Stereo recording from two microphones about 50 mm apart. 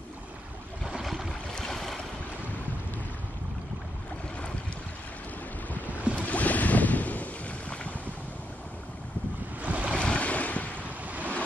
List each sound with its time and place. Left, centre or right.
1.0 s a sound: centre
1.5 s boat: centre
5.9 s boat: right
6.2 s waves: left
9.6 s waves: right
9.9 s waves: left
11.1 s waves: right